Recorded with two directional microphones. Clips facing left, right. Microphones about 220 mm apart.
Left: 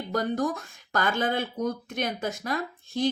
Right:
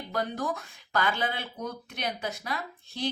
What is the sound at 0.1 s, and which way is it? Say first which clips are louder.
Speech: left 5 dB; 45° left (ahead or behind).